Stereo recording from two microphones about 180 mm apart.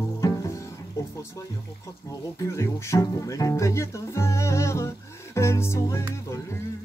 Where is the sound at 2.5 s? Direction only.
15° left (ahead or behind).